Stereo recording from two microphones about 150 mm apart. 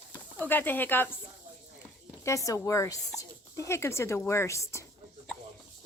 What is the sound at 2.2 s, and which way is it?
Speech, 20° left (ahead or behind).